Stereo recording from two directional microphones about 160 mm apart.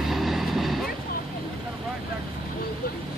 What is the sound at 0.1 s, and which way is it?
Vehicle, centre (ahead or behind).